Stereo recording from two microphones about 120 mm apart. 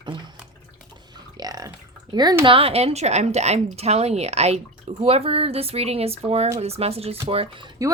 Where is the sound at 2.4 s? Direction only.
50° right (ahead or behind).